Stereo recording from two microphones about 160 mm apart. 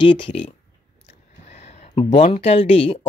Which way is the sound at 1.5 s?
45° left (ahead or behind).